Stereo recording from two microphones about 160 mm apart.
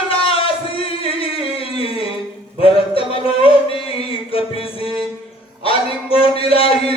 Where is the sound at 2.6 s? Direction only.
35° left (ahead or behind).